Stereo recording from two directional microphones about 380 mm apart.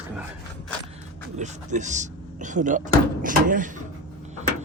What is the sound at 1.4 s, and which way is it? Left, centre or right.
Speech, centre.